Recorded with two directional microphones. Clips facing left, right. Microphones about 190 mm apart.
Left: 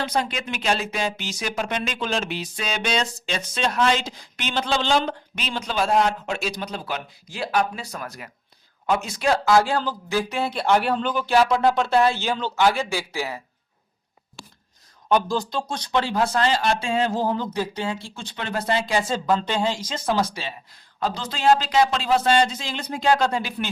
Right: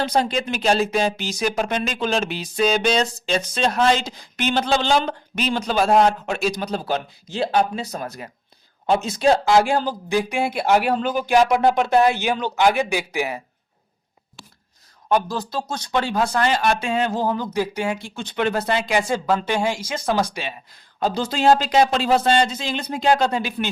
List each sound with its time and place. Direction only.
0.0 s speech: 35° right (ahead or behind); by 13.4 s 20° right (ahead or behind)
16.4 s speech: 30° left (ahead or behind)
17.4 s speech: 10° right (ahead or behind)
18.2 s speech: 30° left (ahead or behind)
18.8 s speech: 15° right (ahead or behind)
21.0 s speech: 30° right (ahead or behind)